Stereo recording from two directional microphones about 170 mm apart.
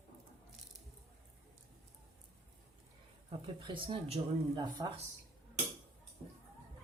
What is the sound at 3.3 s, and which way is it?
Speech, 30° right (ahead or behind).